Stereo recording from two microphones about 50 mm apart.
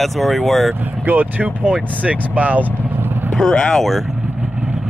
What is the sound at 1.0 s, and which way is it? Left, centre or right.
Speech, right.